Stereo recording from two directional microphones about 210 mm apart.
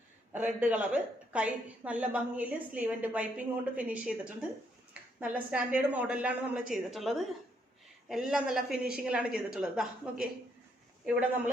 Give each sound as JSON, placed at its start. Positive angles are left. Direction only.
{"t": 0.3, "sound": "a woman's voice", "side_deg": -5}